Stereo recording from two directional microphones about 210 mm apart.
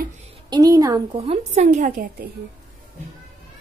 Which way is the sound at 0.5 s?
15° right (ahead or behind).